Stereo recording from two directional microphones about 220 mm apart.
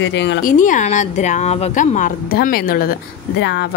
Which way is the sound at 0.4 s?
35° left (ahead or behind).